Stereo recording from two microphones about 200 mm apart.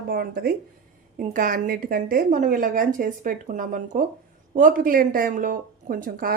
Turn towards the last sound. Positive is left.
turn(degrees=-45)  # may be behind; listen again after turning